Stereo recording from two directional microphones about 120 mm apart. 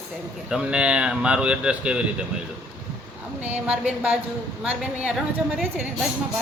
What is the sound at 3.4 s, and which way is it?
Speech, 10° right (ahead or behind).